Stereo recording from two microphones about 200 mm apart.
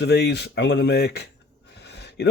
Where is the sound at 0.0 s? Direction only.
55° left (ahead or behind).